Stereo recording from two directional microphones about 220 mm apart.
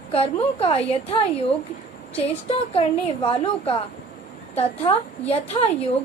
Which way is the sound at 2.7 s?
25° left (ahead or behind).